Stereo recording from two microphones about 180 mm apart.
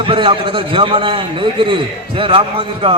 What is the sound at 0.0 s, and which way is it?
A man's voice, 30° right (ahead or behind).